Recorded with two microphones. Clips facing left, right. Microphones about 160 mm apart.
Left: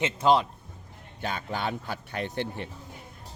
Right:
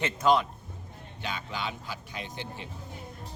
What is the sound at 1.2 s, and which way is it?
Speech, 50° left (ahead or behind).